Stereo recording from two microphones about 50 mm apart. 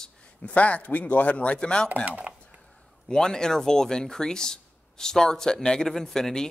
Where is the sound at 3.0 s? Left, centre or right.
Centre.